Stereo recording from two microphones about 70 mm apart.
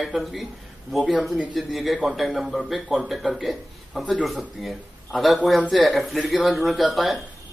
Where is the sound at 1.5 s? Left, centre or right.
Centre.